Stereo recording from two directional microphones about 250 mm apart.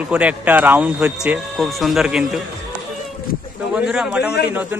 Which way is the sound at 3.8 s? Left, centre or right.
Centre.